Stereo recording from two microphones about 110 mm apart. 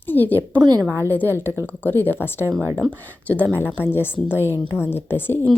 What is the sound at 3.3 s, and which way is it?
A woman's voice, 15° left (ahead or behind).